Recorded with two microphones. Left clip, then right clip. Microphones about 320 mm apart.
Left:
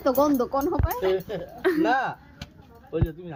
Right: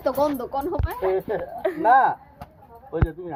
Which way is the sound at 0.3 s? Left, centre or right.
Left.